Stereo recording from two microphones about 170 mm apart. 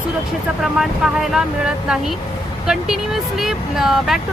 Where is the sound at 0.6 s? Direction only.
Centre (ahead or behind).